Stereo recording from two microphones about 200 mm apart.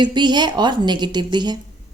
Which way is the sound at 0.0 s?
20° right (ahead or behind).